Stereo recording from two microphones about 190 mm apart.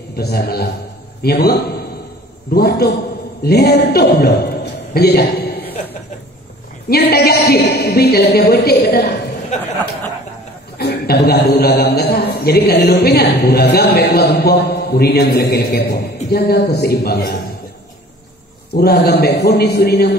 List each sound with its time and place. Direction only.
0.1 s a man's voice: 55° left (ahead or behind)
4.9 s a sound: 55° left (ahead or behind)
6.9 s a man's voice: 55° left (ahead or behind)
9.5 s a sound: 40° left (ahead or behind)
10.8 s a man's voice: 55° left (ahead or behind)
18.7 s a man's voice: 55° left (ahead or behind)